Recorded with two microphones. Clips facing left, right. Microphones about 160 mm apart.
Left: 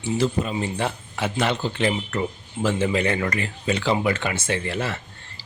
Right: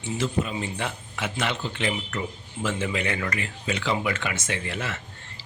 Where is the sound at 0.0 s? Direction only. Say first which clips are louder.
Left 4 dB; 35° left (ahead or behind).